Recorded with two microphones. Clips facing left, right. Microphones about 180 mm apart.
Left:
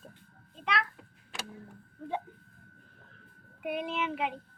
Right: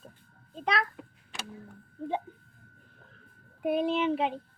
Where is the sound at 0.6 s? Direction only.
40° right (ahead or behind).